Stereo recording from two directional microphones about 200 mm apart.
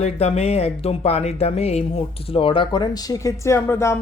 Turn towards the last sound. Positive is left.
turn(degrees=15)  # may be behind; listen again after turning